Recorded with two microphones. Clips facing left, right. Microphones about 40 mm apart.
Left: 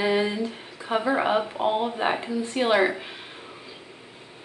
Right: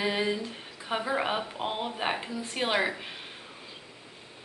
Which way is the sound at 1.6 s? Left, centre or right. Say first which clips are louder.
Left 8 dB; centre.